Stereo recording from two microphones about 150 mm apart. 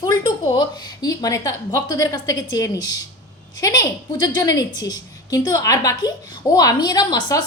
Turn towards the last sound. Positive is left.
turn(degrees=25)  # may be behind; listen again after turning